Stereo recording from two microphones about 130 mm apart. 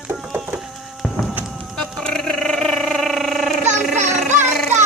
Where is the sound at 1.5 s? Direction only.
5° left (ahead or behind).